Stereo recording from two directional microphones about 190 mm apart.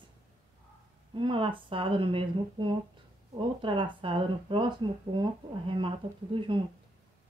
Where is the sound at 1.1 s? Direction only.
25° right (ahead or behind).